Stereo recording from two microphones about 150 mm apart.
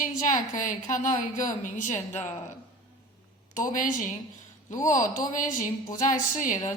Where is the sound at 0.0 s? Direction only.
60° left (ahead or behind).